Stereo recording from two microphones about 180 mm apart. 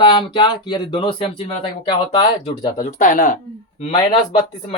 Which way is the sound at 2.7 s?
40° left (ahead or behind).